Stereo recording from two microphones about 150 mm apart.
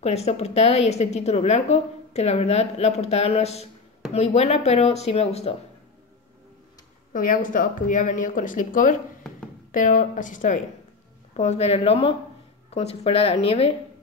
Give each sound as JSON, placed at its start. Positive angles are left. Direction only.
{"t": 0.0, "sound": "a woman's voice", "side_deg": 45}
{"t": 7.1, "sound": "speech", "side_deg": 65}
{"t": 11.3, "sound": "a woman's voice", "side_deg": 45}